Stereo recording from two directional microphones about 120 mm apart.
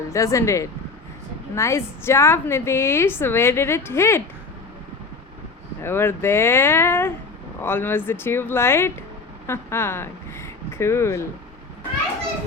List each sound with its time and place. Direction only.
0.1 s a woman's voice: 25° left (ahead or behind)
5.8 s a woman's voice: 20° left (ahead or behind)